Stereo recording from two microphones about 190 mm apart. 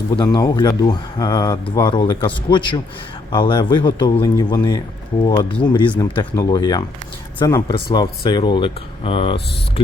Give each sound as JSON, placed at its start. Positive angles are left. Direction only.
{"t": 0.3, "sound": "speech", "side_deg": 20}